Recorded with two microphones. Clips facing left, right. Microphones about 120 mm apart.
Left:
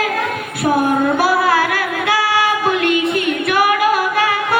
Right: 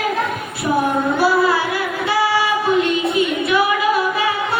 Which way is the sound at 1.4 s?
70° left (ahead or behind).